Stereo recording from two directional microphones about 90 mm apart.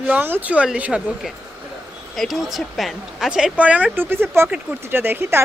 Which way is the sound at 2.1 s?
Centre (ahead or behind).